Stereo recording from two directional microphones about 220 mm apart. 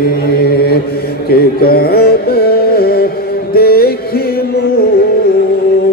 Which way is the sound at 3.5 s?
45° left (ahead or behind).